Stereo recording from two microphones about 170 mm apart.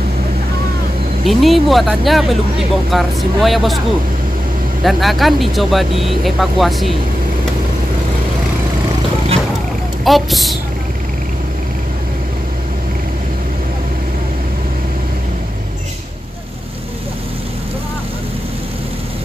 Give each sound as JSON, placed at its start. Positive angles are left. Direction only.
{"t": 1.2, "sound": "speech", "side_deg": 0}
{"t": 4.8, "sound": "speech", "side_deg": 0}
{"t": 10.0, "sound": "speech", "side_deg": 0}